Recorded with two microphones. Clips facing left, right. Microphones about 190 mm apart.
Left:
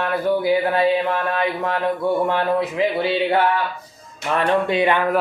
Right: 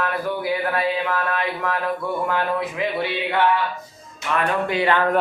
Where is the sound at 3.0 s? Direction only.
30° left (ahead or behind).